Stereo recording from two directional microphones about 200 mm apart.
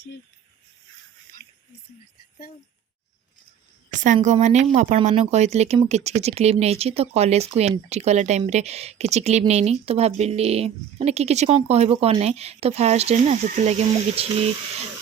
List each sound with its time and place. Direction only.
3.8 s a woman's voice: 40° right (ahead or behind)